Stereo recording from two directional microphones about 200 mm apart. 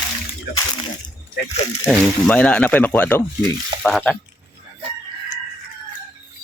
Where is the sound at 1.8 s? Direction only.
5° left (ahead or behind).